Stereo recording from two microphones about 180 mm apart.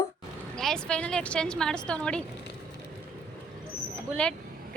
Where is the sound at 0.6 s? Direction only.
5° left (ahead or behind).